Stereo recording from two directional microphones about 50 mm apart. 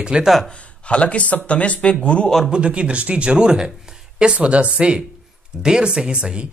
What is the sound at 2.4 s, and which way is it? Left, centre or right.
A man's voice, right.